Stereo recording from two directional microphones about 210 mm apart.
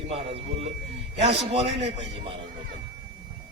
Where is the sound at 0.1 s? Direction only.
25° right (ahead or behind).